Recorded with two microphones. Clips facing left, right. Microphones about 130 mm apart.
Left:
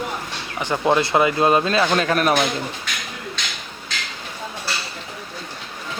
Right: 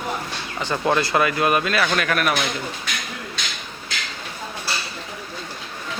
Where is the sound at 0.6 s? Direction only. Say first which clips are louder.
Left 2 dB; 20° left (ahead or behind).